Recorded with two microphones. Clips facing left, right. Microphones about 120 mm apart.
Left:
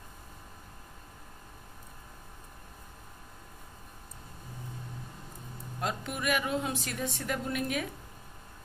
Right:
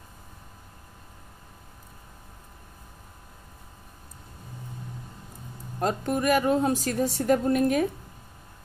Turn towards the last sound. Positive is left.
turn(degrees=-40)  # may be behind; listen again after turning